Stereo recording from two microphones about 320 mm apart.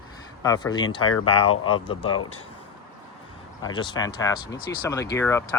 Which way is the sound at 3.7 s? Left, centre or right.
Centre.